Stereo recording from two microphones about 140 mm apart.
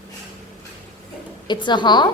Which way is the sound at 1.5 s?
35° left (ahead or behind).